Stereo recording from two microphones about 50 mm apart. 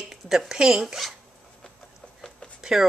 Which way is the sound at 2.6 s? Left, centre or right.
Centre.